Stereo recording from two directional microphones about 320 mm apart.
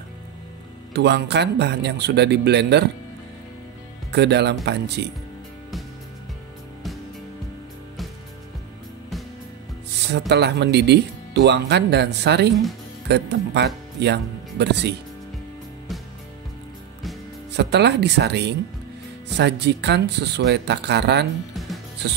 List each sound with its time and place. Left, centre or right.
0.9 s speech: right
4.1 s speech: right
10.0 s speech: right
17.5 s speech: right
21.5 s music: centre